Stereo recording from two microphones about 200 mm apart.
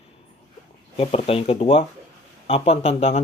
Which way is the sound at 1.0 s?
30° left (ahead or behind).